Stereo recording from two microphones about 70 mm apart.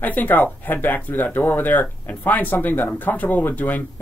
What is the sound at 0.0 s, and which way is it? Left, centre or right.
Speech, left.